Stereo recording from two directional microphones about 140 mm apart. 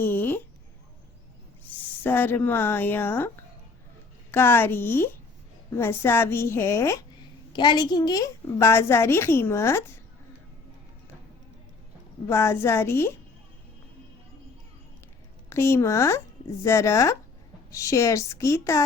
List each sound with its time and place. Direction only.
0.0 s a sound: 15° left (ahead or behind)
2.0 s a woman's voice: 15° left (ahead or behind)
7.5 s a woman's voice: 30° left (ahead or behind)
12.3 s a woman's voice: 20° left (ahead or behind)
15.4 s a woman's voice: 20° left (ahead or behind)